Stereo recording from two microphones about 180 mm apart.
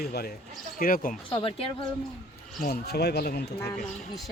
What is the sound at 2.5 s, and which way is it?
Speech, 60° left (ahead or behind).